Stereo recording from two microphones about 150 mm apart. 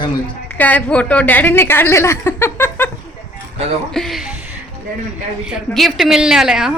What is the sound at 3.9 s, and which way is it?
Speech, centre (ahead or behind).